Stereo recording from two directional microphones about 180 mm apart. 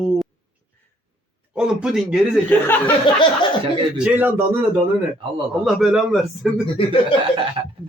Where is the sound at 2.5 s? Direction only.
10° left (ahead or behind).